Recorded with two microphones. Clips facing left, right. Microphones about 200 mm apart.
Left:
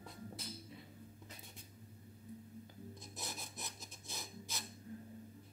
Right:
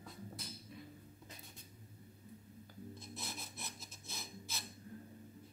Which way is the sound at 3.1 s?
15° left (ahead or behind).